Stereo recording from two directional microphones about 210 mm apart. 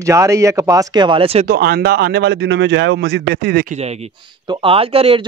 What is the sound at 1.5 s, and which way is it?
Speech, 50° right (ahead or behind).